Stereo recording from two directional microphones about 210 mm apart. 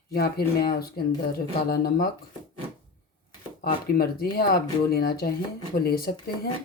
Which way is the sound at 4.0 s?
45° left (ahead or behind).